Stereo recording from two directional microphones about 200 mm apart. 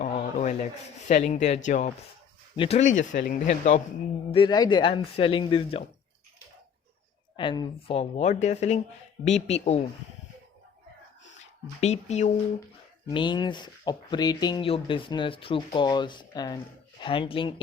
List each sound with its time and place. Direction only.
0.0 s rub: 35° left (ahead or behind)
1.0 s speech: 35° left (ahead or behind)
4.3 s speech: 25° left (ahead or behind)
7.3 s speech: 20° left (ahead or behind)
11.8 s speech: 35° left (ahead or behind)
13.1 s speech: 20° left (ahead or behind)